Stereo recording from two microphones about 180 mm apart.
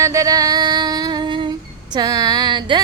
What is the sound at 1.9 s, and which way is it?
Speech, 20° right (ahead or behind).